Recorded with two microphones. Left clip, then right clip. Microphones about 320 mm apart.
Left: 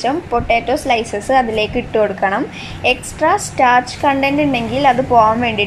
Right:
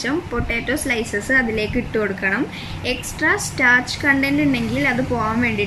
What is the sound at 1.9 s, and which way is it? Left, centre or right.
Speech, left.